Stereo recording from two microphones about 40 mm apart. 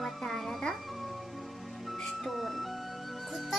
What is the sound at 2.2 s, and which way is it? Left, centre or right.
Speech, centre.